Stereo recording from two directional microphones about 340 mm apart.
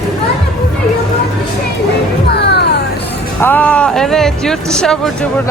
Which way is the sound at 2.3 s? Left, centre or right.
Left.